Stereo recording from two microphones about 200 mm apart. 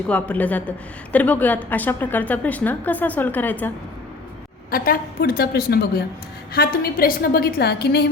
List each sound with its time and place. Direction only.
0.1 s a woman's voice: 5° left (ahead or behind)
4.7 s a woman's voice: 45° left (ahead or behind)